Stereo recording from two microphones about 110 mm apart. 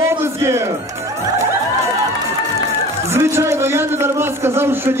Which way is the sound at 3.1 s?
25° right (ahead or behind).